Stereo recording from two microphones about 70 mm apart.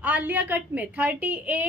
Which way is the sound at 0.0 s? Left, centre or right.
Right.